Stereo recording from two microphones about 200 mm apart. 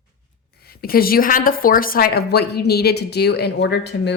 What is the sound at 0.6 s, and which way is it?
A woman's voice, 50° left (ahead or behind).